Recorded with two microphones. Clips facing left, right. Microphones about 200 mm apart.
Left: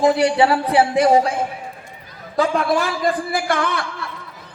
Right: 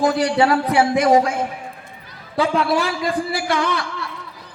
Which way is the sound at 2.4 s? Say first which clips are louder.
Even; 50° left (ahead or behind).